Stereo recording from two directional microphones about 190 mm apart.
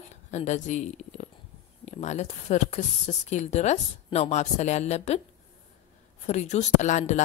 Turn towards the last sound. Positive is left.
turn(degrees=40)  # may be behind; listen again after turning